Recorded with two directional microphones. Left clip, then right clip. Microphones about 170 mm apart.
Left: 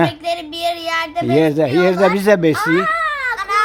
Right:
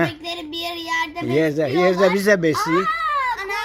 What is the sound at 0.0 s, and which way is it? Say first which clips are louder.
Speech: left 6 dB; 25° left (ahead or behind).